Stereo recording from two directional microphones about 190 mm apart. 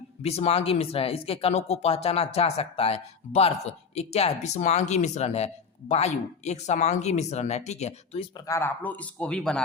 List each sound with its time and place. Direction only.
0.2 s speech: 35° left (ahead or behind)
8.4 s a man's voice: 15° left (ahead or behind)